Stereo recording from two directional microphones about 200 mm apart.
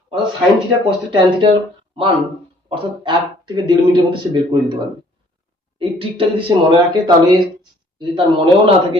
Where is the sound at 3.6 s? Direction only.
25° right (ahead or behind).